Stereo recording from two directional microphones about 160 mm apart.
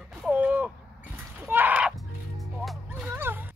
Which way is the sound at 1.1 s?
10° right (ahead or behind).